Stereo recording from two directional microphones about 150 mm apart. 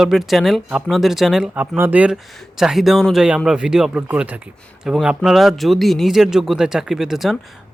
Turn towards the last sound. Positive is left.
turn(degrees=0)  # may be behind; listen again after turning